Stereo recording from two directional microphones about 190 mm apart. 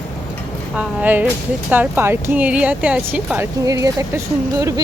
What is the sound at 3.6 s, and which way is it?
Speech, 20° right (ahead or behind).